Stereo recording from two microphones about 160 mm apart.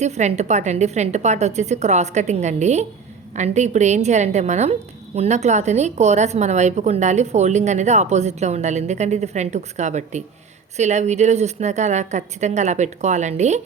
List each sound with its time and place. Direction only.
0.0 s a woman's voice: 45° right (ahead or behind)